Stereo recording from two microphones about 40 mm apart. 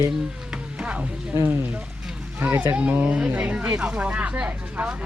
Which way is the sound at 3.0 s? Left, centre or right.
Right.